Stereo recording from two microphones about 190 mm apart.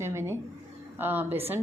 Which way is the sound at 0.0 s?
15° right (ahead or behind).